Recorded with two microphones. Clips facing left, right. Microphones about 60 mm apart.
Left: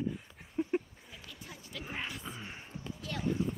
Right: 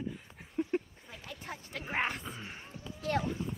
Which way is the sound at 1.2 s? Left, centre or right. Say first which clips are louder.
Right 7 dB; right.